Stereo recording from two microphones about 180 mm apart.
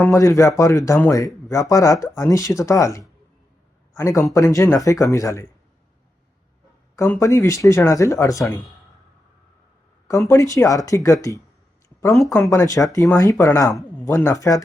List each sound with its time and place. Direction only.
0.0 s a man's voice: 15° left (ahead or behind)
6.9 s a man's voice: 15° left (ahead or behind)
10.1 s a man's voice: 15° left (ahead or behind)